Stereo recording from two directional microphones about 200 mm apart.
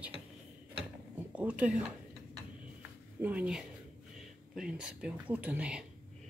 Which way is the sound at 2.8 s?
5° right (ahead or behind).